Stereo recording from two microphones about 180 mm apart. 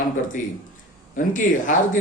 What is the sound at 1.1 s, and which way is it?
Speech, 45° left (ahead or behind).